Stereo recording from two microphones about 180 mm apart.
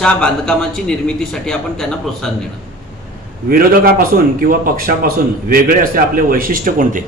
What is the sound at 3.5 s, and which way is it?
A man's voice, 55° right (ahead or behind).